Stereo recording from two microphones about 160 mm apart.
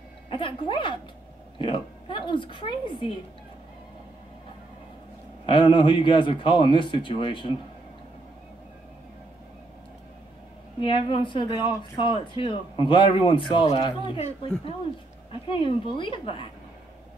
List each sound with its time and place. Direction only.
0.3 s speech: 30° left (ahead or behind)
5.5 s speech: 30° left (ahead or behind)
10.8 s speech: 30° left (ahead or behind)
15.5 s speech: 30° left (ahead or behind)